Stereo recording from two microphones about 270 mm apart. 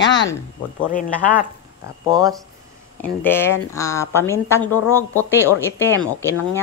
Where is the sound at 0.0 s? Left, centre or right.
Left.